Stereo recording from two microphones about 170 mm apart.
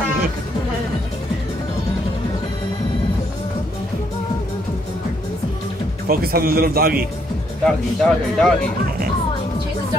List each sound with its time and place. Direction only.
6.0 s a man's voice: 60° right (ahead or behind)
7.6 s a man's voice: 5° left (ahead or behind)